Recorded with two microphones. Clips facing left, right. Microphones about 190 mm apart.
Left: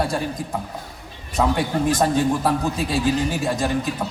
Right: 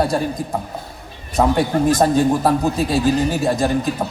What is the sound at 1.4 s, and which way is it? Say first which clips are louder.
A man's voice: right 4 dB; 40° right (ahead or behind).